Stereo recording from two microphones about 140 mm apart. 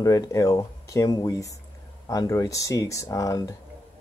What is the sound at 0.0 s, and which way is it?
Speech, 25° left (ahead or behind).